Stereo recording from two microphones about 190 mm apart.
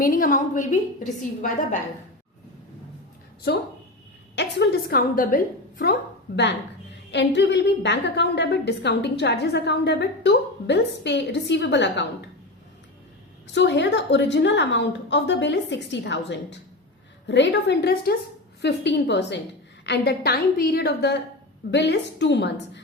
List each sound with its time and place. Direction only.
0.0 s a woman's voice: 50° left (ahead or behind)
4.4 s a woman's voice: 60° left (ahead or behind)
13.5 s a woman's voice: 65° left (ahead or behind)